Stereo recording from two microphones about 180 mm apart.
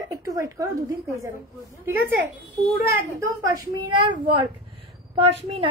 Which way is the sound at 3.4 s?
20° right (ahead or behind).